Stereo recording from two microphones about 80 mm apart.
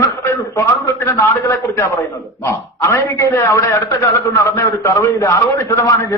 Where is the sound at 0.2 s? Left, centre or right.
Left.